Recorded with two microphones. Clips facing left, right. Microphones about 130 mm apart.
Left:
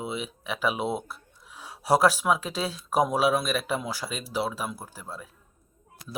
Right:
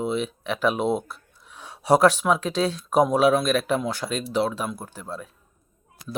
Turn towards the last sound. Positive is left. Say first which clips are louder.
# right 5 dB
turn(degrees=5)  # may be behind; listen again after turning